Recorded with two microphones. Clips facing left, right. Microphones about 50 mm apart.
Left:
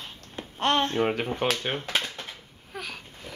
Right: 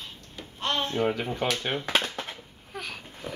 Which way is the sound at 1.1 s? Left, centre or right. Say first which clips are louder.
Left 1 dB; left.